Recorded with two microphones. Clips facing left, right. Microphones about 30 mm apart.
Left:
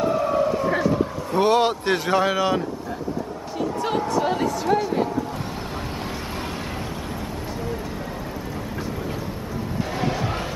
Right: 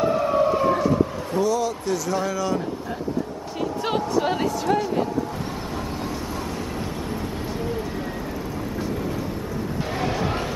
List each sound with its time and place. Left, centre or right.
0.0 s siren: centre
1.3 s speech: left
2.1 s speech: left
4.1 s speech: centre
4.5 s speech: centre
9.9 s crowd: centre